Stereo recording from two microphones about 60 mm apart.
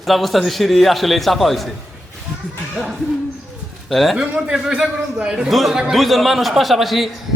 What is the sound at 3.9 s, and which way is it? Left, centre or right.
Speech, centre.